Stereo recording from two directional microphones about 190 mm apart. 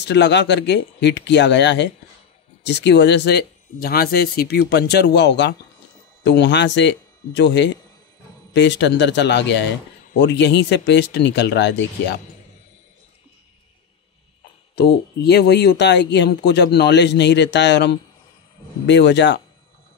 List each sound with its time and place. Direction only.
0.0 s speech: 65° left (ahead or behind)
14.8 s speech: 60° left (ahead or behind)